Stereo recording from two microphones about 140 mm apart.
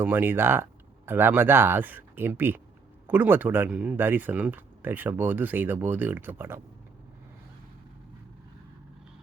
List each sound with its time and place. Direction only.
0.0 s speech: 15° right (ahead or behind)